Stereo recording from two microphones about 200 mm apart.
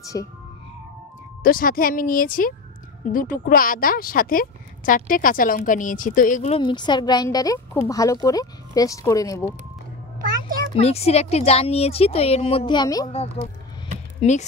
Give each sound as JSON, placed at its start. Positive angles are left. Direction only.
{"t": 0.0, "sound": "speech", "side_deg": 15}
{"t": 1.4, "sound": "a woman's voice", "side_deg": 45}
{"t": 6.6, "sound": "speech", "side_deg": 20}
{"t": 10.8, "sound": "speech", "side_deg": 30}
{"t": 13.1, "sound": "speech", "side_deg": 30}